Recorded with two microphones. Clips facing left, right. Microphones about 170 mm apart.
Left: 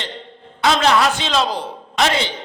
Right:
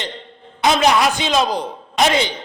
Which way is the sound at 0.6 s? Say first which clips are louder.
Right 1 dB; 15° right (ahead or behind).